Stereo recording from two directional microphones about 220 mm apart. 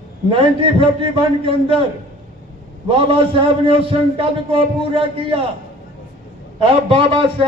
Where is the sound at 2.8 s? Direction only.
25° right (ahead or behind).